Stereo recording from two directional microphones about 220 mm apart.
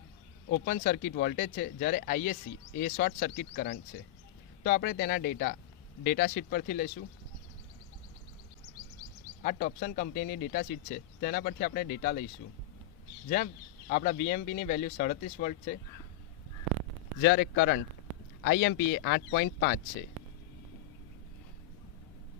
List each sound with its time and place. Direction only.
0.5 s speech: 45° left (ahead or behind)
9.4 s speech: 40° left (ahead or behind)
13.2 s speech: 40° left (ahead or behind)
17.2 s speech: 50° left (ahead or behind)